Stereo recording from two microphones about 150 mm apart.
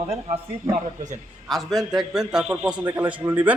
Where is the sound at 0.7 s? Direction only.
55° right (ahead or behind).